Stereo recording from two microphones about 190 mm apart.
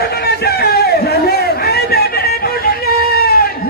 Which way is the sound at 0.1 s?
55° left (ahead or behind).